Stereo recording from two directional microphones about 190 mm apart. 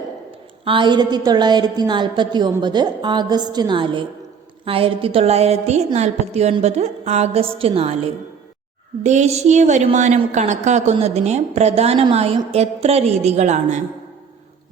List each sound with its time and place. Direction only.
0.6 s a woman's voice: 25° right (ahead or behind)